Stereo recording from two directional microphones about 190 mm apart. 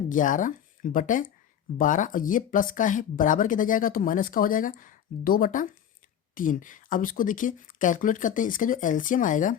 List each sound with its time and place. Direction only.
0.1 s speech: 45° left (ahead or behind)